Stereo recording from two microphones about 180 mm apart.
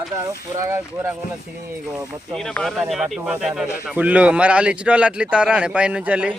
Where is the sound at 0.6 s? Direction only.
15° right (ahead or behind).